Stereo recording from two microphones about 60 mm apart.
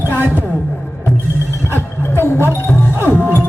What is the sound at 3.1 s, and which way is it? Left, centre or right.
Music, right.